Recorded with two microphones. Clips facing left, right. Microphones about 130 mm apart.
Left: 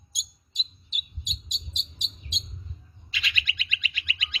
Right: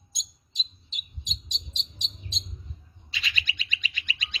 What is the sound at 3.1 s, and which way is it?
Bird, 35° right (ahead or behind).